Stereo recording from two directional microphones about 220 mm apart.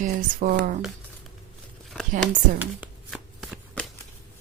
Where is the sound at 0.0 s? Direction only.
40° right (ahead or behind).